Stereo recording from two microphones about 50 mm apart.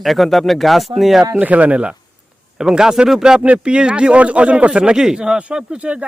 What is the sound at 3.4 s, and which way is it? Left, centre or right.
Speech, right.